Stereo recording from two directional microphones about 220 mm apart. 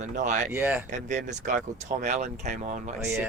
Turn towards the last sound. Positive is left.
turn(degrees=-10)  # may be behind; listen again after turning